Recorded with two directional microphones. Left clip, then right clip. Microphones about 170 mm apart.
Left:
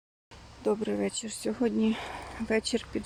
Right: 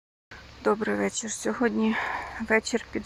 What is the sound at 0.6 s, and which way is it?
Speech, centre (ahead or behind).